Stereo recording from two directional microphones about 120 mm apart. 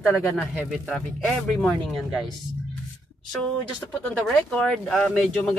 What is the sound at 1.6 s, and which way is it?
Speech, centre (ahead or behind).